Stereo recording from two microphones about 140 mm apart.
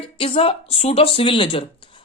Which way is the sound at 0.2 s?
40° left (ahead or behind).